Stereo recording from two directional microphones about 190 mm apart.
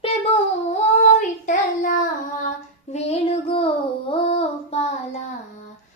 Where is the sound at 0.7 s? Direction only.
40° left (ahead or behind).